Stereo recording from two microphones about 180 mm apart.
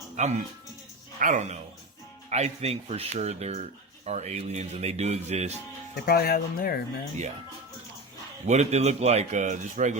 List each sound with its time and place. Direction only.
0.2 s a man's voice: 40° right (ahead or behind)
6.1 s speech: 60° left (ahead or behind)
8.4 s speech: 40° right (ahead or behind)